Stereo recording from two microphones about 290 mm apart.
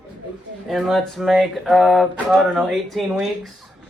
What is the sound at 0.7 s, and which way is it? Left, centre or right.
Speech, centre.